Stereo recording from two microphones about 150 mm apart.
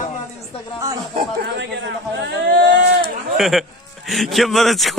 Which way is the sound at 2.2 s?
75° right (ahead or behind).